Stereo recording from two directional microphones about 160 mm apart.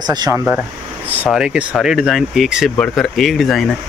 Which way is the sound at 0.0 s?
25° right (ahead or behind).